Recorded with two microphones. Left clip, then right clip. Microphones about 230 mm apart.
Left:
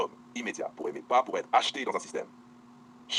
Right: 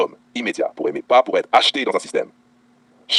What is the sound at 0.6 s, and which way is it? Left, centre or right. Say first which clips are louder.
Speech: right 13 dB; right.